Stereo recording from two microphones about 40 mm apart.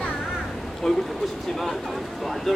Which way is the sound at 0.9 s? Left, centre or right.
Centre.